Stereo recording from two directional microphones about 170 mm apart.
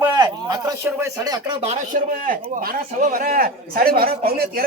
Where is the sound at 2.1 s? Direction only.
55° right (ahead or behind).